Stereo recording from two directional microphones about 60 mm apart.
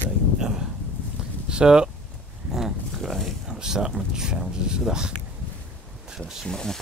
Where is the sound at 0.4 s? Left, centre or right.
Centre.